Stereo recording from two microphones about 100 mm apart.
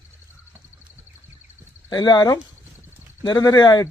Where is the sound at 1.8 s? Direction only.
40° left (ahead or behind).